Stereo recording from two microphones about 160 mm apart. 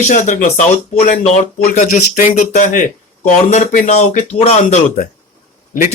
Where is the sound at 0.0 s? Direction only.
50° left (ahead or behind).